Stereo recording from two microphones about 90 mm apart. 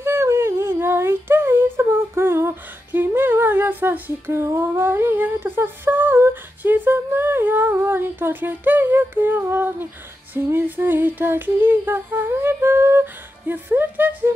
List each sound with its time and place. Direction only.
0.0 s speech: 30° right (ahead or behind)
10.3 s humming: 20° right (ahead or behind)